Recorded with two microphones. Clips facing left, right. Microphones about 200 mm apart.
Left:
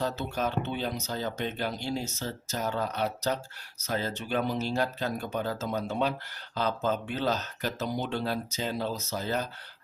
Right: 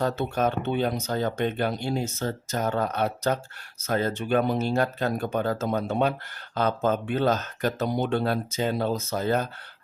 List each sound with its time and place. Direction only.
0.0 s speech: 55° right (ahead or behind)